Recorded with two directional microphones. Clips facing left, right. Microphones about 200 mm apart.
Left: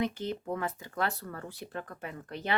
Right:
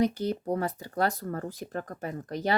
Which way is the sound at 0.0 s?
40° right (ahead or behind).